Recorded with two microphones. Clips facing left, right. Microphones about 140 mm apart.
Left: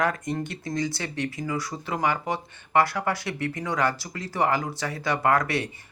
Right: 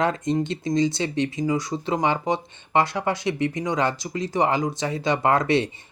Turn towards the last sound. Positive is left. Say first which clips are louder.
# right 3 dB
turn(degrees=-25)  # may be behind; listen again after turning